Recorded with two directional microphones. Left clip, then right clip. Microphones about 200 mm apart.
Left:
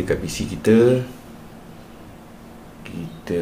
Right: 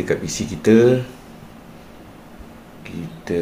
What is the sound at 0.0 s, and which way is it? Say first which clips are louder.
Speech: right 1 dB; centre (ahead or behind).